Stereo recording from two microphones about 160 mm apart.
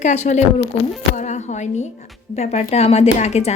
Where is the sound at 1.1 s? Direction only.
50° left (ahead or behind).